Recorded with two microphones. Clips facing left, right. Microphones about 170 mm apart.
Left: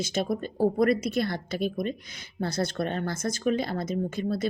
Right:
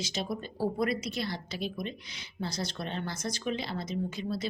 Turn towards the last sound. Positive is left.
turn(degrees=50)  # may be behind; listen again after turning